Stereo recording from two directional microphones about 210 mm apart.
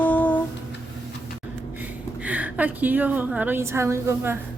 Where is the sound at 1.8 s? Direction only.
5° right (ahead or behind).